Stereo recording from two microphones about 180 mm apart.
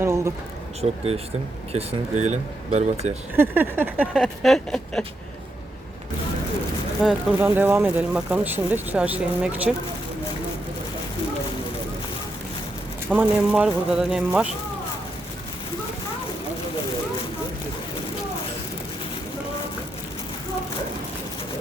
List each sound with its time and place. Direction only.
0.0 s a sound: 15° right (ahead or behind)
0.8 s speech: 35° right (ahead or behind)
3.3 s speech: 10° right (ahead or behind)
7.0 s speech: 5° right (ahead or behind)
13.1 s speech: 5° right (ahead or behind)